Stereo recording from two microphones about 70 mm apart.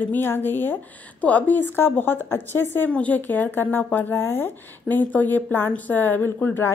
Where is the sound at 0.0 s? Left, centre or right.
Left.